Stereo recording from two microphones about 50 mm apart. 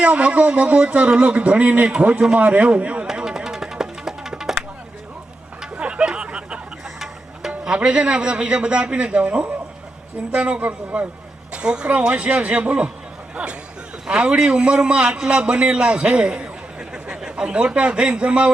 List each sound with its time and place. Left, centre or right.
0.0 s a man's voice: right
3.1 s music: centre
5.7 s a sound: right
7.6 s a man's voice: centre
11.5 s a man's voice: centre